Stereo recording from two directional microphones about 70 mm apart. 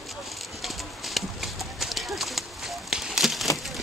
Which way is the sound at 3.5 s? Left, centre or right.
Centre.